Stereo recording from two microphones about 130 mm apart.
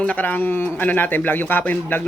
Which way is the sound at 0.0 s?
10° left (ahead or behind).